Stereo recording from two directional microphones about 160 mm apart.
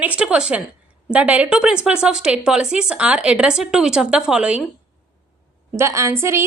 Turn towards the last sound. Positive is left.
turn(degrees=-15)  # may be behind; listen again after turning